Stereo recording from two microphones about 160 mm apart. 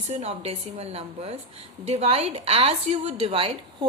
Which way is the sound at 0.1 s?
40° right (ahead or behind).